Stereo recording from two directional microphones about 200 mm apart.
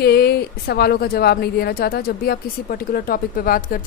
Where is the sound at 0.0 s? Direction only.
55° left (ahead or behind).